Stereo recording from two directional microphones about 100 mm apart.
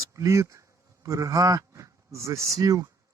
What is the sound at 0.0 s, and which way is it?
Speech, 30° right (ahead or behind).